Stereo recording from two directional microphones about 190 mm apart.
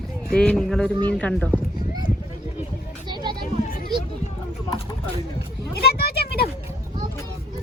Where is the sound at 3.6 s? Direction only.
45° left (ahead or behind).